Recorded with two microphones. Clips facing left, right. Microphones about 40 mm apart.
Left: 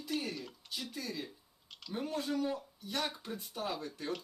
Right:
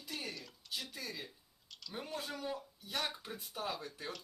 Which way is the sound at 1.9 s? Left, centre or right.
Centre.